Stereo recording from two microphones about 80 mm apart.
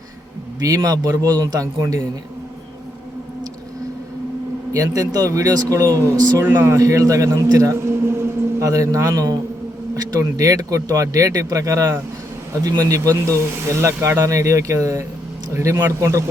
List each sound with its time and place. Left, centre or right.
0.6 s speech: right
4.8 s speech: right
6.4 s a man's voice: right
6.7 s a man's voice: right